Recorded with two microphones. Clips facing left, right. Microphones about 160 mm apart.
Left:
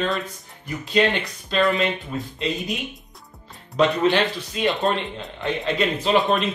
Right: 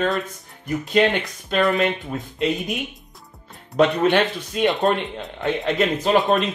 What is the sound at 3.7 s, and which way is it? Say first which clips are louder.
Speech: right 2 dB; 50° right (ahead or behind).